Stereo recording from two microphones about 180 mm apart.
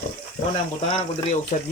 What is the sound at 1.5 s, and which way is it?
Speech, 45° left (ahead or behind).